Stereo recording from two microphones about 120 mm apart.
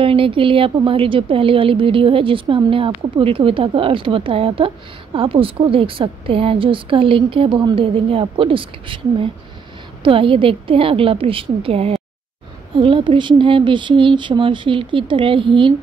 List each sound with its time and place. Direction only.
0.0 s speech: 50° right (ahead or behind)